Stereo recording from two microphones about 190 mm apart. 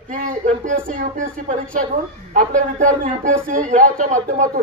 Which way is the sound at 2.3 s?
40° right (ahead or behind).